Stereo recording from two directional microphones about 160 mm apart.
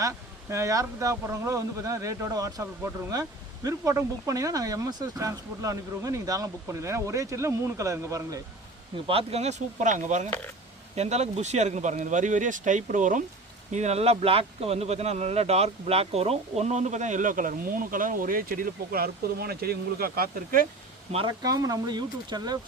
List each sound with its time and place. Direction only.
0.0 s speech: 20° right (ahead or behind)
9.0 s speech: 40° right (ahead or behind)
10.2 s speech: 10° left (ahead or behind)
10.9 s speech: 45° right (ahead or behind); by 20.7 s 65° right (ahead or behind)
21.1 s speech: 35° right (ahead or behind)
21.4 s speech: 20° right (ahead or behind)